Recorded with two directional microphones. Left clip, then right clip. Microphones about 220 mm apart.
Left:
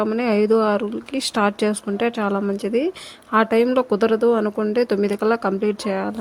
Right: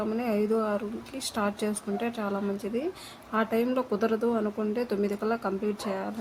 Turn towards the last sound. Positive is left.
turn(degrees=35)  # may be behind; listen again after turning